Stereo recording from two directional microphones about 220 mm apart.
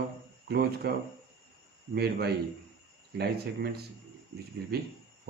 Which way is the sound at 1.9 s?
45° right (ahead or behind).